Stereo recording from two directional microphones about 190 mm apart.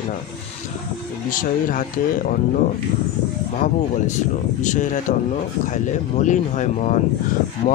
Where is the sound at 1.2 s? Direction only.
45° left (ahead or behind).